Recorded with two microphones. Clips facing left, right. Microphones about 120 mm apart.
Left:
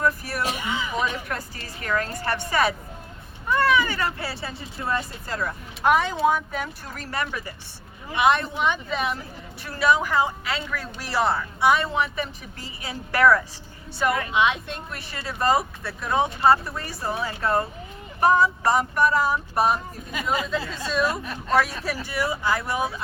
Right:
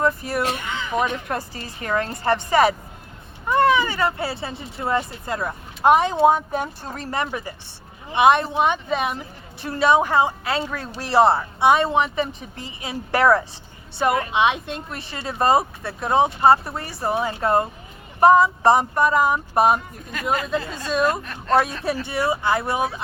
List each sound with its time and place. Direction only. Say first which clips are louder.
0.0 s speech: right 3 dB; 25° right (ahead or behind)
0.5 s speech: even; 10° left (ahead or behind)
1.3 s a woman's voice: right 5 dB; 25° right (ahead or behind)
21.5 s a woman's voice: right 3 dB; 25° right (ahead or behind)